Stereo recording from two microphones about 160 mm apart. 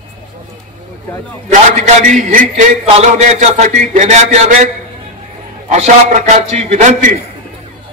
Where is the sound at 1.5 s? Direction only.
50° right (ahead or behind).